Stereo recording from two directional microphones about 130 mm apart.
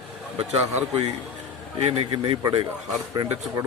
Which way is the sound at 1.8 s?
40° right (ahead or behind).